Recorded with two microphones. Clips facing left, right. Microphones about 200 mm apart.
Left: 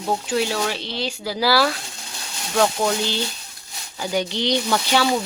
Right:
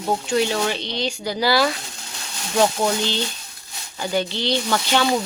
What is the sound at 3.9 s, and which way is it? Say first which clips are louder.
Speech: even; 10° left (ahead or behind).